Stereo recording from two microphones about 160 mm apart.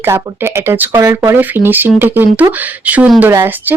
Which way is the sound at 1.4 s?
10° right (ahead or behind).